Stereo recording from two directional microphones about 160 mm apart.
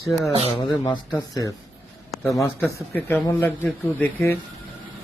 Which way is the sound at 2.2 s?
20° left (ahead or behind).